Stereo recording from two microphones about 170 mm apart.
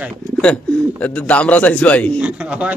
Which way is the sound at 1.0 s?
10° left (ahead or behind).